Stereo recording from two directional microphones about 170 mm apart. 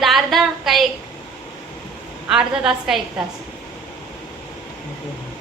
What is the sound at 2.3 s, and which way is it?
Speech, 5° right (ahead or behind).